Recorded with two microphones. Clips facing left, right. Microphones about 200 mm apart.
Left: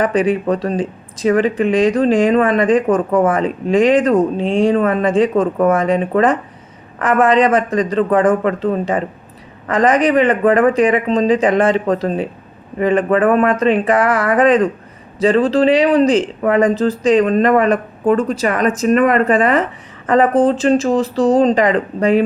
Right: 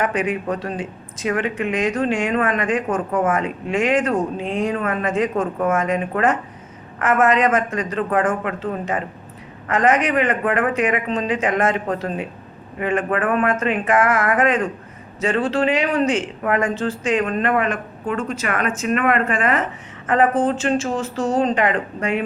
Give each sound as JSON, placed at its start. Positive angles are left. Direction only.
{"t": 0.0, "sound": "speech", "side_deg": 35}